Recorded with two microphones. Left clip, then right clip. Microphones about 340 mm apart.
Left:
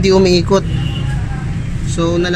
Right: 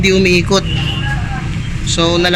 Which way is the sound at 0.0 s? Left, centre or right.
Centre.